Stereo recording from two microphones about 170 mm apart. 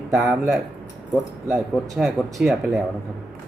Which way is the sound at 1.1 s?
15° right (ahead or behind).